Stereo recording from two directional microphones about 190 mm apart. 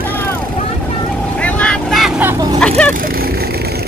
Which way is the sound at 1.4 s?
5° left (ahead or behind).